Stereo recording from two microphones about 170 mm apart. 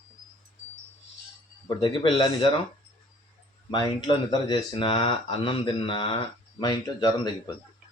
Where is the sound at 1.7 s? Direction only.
25° left (ahead or behind).